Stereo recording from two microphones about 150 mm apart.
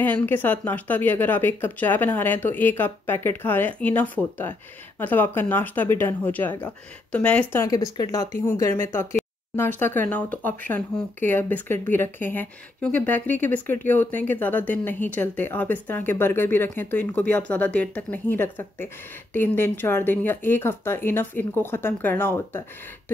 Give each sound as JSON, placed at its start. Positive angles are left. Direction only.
{"t": 0.0, "sound": "speech", "side_deg": 10}
{"t": 7.6, "sound": "speech", "side_deg": 25}